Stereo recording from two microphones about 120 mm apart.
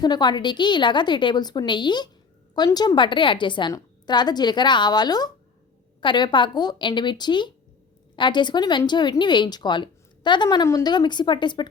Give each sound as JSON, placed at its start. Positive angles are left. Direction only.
{"t": 0.0, "sound": "a woman's voice", "side_deg": 35}
{"t": 10.9, "sound": "a woman's voice", "side_deg": 40}